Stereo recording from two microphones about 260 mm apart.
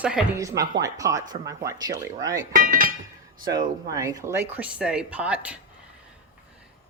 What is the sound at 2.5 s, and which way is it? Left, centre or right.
Speech, right.